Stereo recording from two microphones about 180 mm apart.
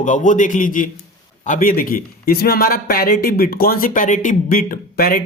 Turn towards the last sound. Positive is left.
turn(degrees=55)  # may be behind; listen again after turning